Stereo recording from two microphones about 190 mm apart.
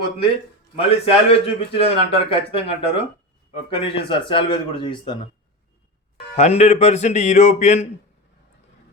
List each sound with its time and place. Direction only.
0.8 s a man's voice: 30° left (ahead or behind)
6.3 s speech: 35° left (ahead or behind)